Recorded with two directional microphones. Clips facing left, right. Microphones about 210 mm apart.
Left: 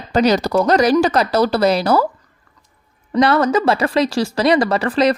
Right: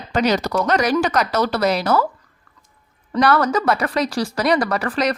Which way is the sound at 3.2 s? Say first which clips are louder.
Left 3 dB; 20° left (ahead or behind).